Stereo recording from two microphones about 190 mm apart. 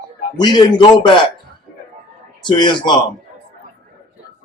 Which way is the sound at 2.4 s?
25° left (ahead or behind).